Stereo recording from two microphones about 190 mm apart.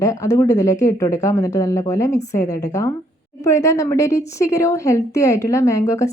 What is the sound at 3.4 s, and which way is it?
A woman's voice, 15° left (ahead or behind).